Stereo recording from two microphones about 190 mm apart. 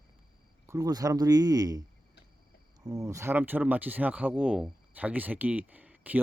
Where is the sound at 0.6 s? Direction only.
15° right (ahead or behind).